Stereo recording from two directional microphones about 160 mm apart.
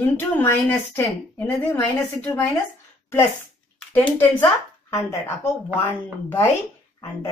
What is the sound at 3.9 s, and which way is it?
A woman's voice, 10° left (ahead or behind).